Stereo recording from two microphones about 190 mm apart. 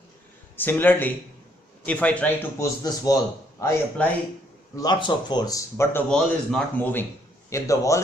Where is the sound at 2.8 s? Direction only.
20° left (ahead or behind).